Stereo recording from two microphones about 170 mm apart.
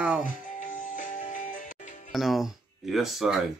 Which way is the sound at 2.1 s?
Centre (ahead or behind).